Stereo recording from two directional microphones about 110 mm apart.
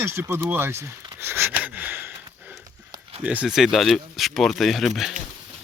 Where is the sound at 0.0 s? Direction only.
20° right (ahead or behind).